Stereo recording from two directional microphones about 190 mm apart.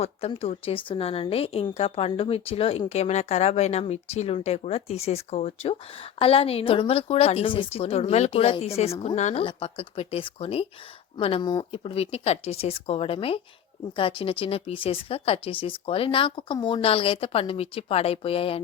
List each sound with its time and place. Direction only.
0.0 s a woman's voice: 30° left (ahead or behind)